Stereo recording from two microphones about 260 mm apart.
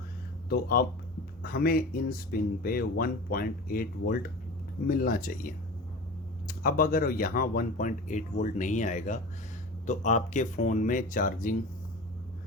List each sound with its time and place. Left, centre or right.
0.4 s speech: left
6.5 s speech: left